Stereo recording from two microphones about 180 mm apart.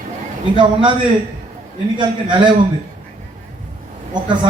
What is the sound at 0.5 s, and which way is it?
Speech, 25° right (ahead or behind).